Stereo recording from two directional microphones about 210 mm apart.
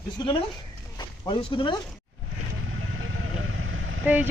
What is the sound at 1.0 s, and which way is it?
Speech, 20° left (ahead or behind).